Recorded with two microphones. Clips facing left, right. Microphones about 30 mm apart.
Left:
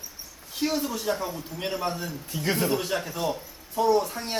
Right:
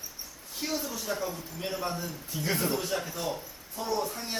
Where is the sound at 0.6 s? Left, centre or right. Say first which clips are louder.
Left 7 dB; left.